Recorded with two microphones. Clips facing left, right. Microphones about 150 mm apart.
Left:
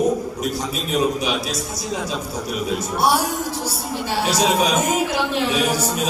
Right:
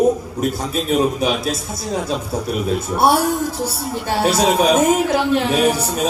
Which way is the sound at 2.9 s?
50° right (ahead or behind).